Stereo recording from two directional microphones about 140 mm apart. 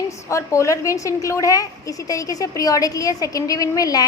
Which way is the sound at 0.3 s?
20° left (ahead or behind).